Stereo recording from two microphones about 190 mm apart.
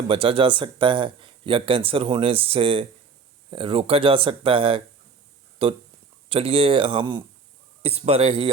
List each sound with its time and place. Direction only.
0.1 s a man's voice: 30° right (ahead or behind)